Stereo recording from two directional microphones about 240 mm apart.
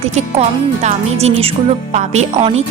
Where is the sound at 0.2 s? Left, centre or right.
Right.